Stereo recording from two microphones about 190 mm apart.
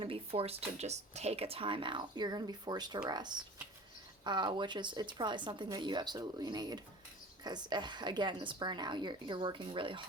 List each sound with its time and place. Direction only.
0.0 s speech: 30° right (ahead or behind)